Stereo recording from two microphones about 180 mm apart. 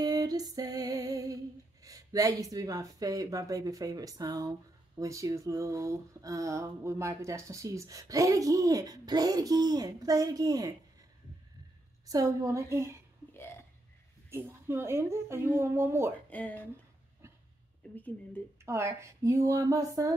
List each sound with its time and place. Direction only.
0.0 s music: 20° right (ahead or behind)
12.1 s a woman's voice: 20° right (ahead or behind)
13.3 s burping: 10° left (ahead or behind)
14.3 s a woman's voice: 15° right (ahead or behind)
16.3 s speech: 10° left (ahead or behind)
17.9 s speech: 10° left (ahead or behind)
18.7 s a woman's voice: 15° right (ahead or behind)